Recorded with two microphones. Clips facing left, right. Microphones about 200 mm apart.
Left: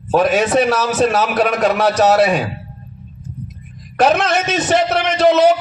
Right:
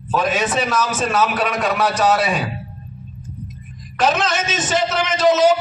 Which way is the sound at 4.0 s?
60° left (ahead or behind).